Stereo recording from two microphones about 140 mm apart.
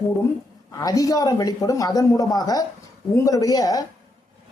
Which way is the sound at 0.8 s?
25° left (ahead or behind).